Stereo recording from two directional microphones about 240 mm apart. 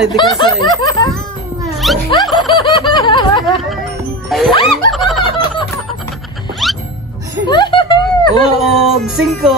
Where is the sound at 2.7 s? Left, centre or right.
Centre.